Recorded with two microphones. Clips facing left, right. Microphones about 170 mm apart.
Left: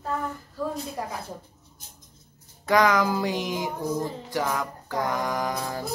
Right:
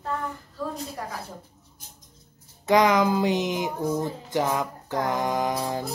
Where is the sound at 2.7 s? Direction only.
20° right (ahead or behind).